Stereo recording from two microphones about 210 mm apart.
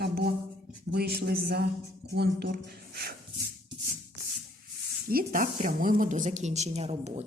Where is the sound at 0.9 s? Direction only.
50° right (ahead or behind).